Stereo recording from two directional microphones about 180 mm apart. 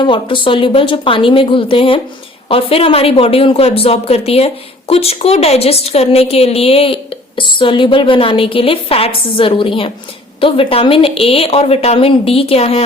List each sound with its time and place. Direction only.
0.0 s a woman's voice: 25° left (ahead or behind)